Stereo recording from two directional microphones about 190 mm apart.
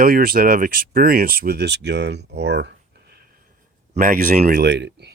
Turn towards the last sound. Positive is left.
turn(degrees=-65)  # may be behind; listen again after turning